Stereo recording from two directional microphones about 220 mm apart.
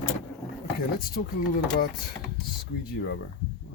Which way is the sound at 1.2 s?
40° left (ahead or behind).